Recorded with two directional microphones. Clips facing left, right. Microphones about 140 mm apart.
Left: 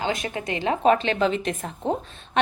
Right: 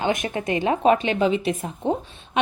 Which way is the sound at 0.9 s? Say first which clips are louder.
Right 1 dB; 15° right (ahead or behind).